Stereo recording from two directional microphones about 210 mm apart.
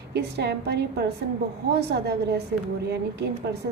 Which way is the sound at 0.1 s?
50° right (ahead or behind).